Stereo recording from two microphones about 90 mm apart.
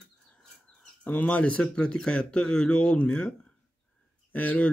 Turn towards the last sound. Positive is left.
turn(degrees=20)  # may be behind; listen again after turning